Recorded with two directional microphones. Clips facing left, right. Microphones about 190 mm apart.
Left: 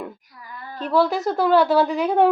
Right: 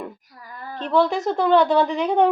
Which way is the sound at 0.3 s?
40° right (ahead or behind).